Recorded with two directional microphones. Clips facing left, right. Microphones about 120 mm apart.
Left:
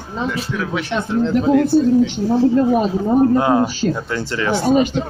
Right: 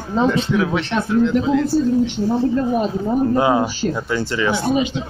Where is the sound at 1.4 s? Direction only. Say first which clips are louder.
Left 3 dB; 55° left (ahead or behind).